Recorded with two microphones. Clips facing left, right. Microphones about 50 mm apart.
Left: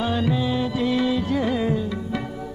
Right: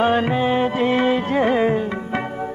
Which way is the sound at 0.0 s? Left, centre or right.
Right.